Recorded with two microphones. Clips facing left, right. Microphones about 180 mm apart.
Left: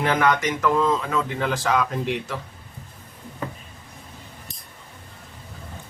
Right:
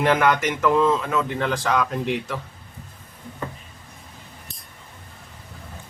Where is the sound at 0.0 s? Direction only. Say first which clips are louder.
Right 2 dB; centre (ahead or behind).